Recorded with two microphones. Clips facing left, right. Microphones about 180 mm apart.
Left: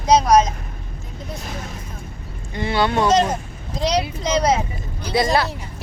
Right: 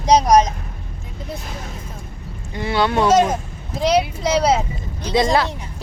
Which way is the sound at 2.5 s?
10° right (ahead or behind).